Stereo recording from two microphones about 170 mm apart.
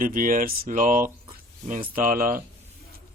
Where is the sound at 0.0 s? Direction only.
55° right (ahead or behind).